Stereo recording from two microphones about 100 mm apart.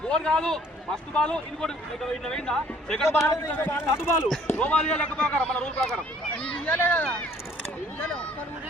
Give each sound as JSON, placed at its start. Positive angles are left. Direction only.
{"t": 0.1, "sound": "a man's voice", "side_deg": 5}
{"t": 3.2, "sound": "speech", "side_deg": 20}